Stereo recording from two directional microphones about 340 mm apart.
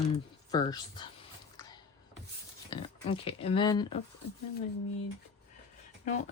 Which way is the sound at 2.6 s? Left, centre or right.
Centre.